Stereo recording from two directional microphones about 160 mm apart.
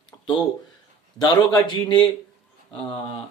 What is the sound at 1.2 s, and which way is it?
Speech, 25° left (ahead or behind).